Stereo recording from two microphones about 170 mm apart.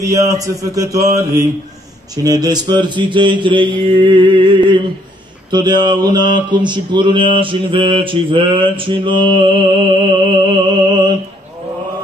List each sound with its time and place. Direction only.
0.0 s mantra: 20° right (ahead or behind)